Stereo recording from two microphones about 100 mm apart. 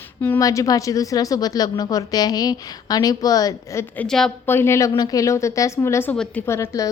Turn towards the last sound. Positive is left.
turn(degrees=30)  # may be behind; listen again after turning